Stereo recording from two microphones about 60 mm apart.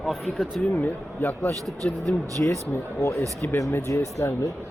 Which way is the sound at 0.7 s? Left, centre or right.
Left.